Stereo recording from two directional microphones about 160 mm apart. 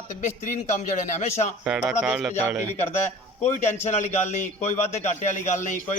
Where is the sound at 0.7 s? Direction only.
45° left (ahead or behind).